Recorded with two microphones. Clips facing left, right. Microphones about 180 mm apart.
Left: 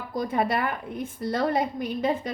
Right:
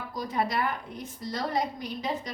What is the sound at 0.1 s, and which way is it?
A woman's voice, 55° left (ahead or behind).